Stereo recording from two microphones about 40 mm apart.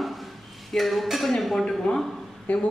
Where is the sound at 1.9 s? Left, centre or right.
Left.